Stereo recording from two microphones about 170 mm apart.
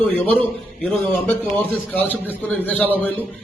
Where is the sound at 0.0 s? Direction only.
10° left (ahead or behind).